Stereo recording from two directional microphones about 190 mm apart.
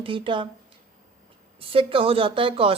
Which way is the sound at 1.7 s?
30° right (ahead or behind).